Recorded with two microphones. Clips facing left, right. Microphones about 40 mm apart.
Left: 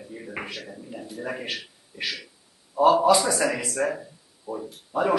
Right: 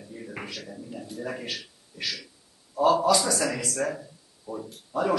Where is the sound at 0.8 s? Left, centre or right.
Centre.